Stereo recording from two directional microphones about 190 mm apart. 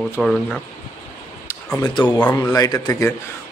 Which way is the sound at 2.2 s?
10° left (ahead or behind).